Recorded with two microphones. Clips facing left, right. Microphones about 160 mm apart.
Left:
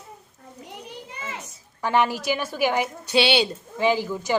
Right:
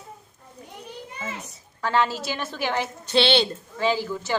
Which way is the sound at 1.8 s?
15° left (ahead or behind).